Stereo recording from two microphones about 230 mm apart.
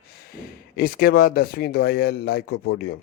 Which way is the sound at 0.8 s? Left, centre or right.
Left.